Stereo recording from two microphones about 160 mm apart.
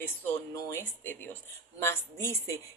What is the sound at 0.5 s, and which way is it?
A woman's voice, 15° left (ahead or behind).